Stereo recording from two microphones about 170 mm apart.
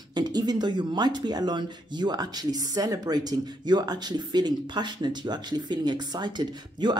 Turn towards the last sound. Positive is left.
turn(degrees=-25)  # may be behind; listen again after turning